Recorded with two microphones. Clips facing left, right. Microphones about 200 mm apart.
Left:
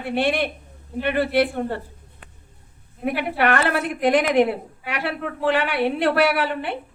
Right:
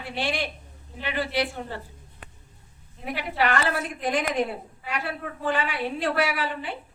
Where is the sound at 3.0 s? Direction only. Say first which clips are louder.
Left 5 dB; 55° left (ahead or behind).